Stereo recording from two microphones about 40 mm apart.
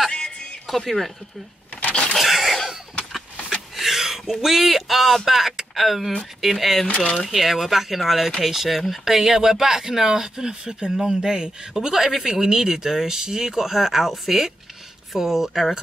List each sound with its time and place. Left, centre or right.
0.7 s speech: centre
1.8 s a sound: left
2.1 s cough: centre
3.1 s vehicle: centre
3.7 s speech: centre
6.9 s speech: left
7.2 s speech: centre